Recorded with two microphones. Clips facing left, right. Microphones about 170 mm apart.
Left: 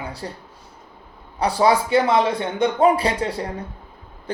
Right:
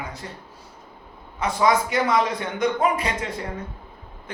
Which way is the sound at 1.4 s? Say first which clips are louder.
Left 3 dB; 35° left (ahead or behind).